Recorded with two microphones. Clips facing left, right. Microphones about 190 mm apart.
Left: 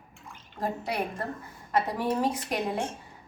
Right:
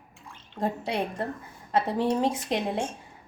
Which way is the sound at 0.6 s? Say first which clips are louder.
Right 2 dB; 25° right (ahead or behind).